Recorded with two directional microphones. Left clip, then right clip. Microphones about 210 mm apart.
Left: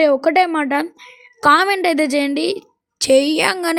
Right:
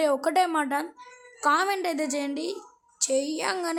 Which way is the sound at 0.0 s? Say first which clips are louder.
Left 9 dB; 25° left (ahead or behind).